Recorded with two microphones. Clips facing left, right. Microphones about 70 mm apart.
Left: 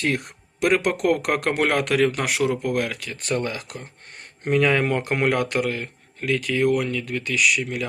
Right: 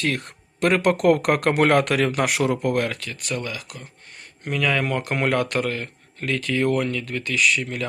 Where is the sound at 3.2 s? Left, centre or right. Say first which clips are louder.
Left 6 dB; left.